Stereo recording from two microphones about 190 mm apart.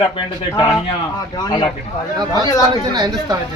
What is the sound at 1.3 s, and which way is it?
Speech, 20° left (ahead or behind).